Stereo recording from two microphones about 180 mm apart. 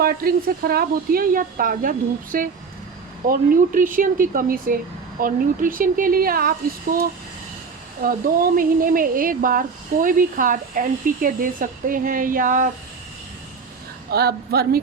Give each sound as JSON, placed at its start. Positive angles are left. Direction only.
{"t": 0.0, "sound": "speech", "side_deg": -55}
{"t": 8.0, "sound": "speech", "side_deg": -50}
{"t": 14.1, "sound": "a woman's voice", "side_deg": -60}